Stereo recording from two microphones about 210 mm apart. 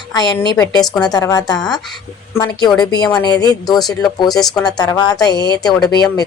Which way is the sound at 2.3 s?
20° left (ahead or behind).